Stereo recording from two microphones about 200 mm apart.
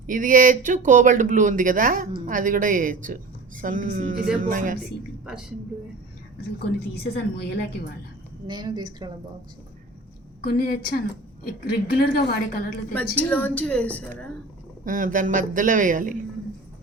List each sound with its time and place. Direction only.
0.1 s a woman's voice: 45° right (ahead or behind)
5.2 s speech: 5° right (ahead or behind)
6.7 s a woman's voice: 55° left (ahead or behind)
8.4 s a woman's voice: 20° right (ahead or behind)
10.4 s a woman's voice: 50° left (ahead or behind)
13.1 s a woman's voice: 10° left (ahead or behind)
14.8 s a woman's voice: 40° right (ahead or behind)